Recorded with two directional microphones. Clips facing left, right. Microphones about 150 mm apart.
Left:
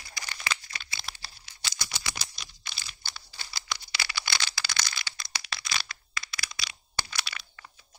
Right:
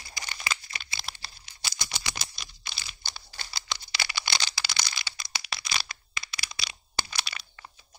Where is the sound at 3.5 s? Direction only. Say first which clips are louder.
Even; 25° right (ahead or behind).